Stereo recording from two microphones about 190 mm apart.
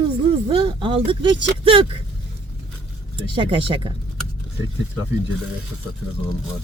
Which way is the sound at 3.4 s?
25° right (ahead or behind).